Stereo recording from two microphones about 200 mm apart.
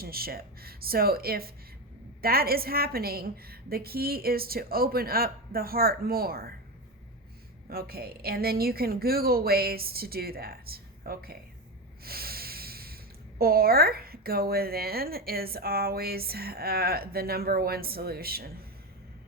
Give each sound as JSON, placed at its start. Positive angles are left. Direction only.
{"t": 0.0, "sound": "a woman's voice", "side_deg": -50}
{"t": 7.7, "sound": "a woman's voice", "side_deg": -50}
{"t": 12.0, "sound": "snort", "side_deg": -50}
{"t": 13.4, "sound": "a woman's voice", "side_deg": -50}